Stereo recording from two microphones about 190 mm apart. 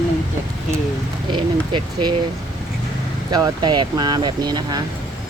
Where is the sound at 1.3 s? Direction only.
25° right (ahead or behind).